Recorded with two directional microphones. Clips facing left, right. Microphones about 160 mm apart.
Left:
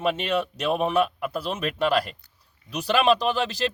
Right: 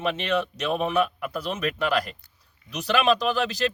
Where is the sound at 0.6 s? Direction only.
30° left (ahead or behind).